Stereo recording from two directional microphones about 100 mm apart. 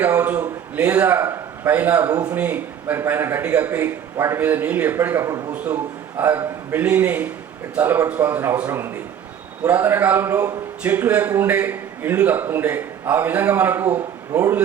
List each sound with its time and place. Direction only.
0.3 s a man's voice: 15° right (ahead or behind)